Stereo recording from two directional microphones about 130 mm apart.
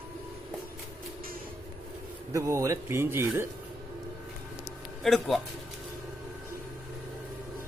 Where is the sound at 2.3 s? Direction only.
25° right (ahead or behind).